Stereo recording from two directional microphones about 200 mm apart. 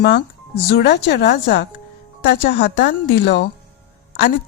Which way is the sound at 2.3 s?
55° left (ahead or behind).